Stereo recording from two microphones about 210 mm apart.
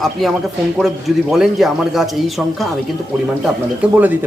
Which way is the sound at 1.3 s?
Centre (ahead or behind).